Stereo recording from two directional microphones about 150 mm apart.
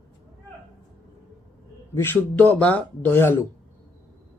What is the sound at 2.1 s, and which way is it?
Speech, 10° left (ahead or behind).